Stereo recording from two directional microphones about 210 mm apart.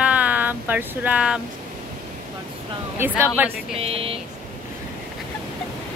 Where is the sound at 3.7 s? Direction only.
25° right (ahead or behind).